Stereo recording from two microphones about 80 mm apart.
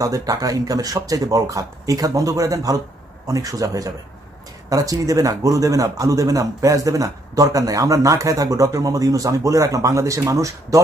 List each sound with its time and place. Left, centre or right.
0.0 s speech: right